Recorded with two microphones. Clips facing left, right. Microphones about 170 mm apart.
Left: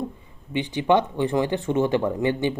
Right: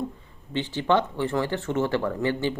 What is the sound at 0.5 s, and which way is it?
Speech, 15° left (ahead or behind).